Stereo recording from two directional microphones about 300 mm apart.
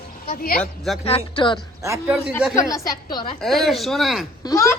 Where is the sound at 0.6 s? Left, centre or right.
Centre.